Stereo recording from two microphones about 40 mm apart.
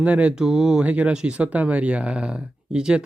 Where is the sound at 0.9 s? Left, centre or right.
Right.